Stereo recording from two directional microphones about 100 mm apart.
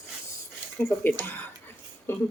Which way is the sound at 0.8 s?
20° left (ahead or behind).